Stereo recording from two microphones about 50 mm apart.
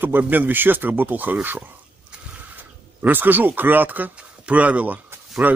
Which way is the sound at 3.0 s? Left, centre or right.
Right.